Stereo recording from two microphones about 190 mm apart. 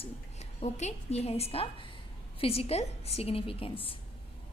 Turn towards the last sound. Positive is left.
turn(degrees=30)  # may be behind; listen again after turning